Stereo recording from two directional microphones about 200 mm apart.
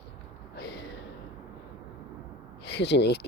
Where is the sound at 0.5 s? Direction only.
55° left (ahead or behind).